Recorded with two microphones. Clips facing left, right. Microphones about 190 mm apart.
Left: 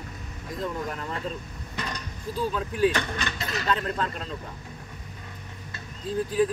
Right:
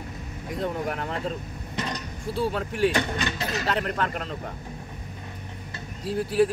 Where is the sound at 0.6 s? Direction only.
70° right (ahead or behind).